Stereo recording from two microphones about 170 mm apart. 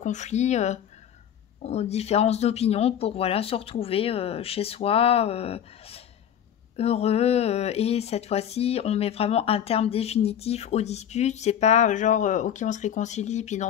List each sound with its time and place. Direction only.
0.0 s speech: 45° left (ahead or behind)